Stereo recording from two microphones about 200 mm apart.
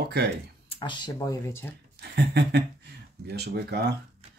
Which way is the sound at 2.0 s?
55° right (ahead or behind).